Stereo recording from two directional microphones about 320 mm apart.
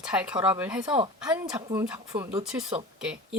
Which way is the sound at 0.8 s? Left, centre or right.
Centre.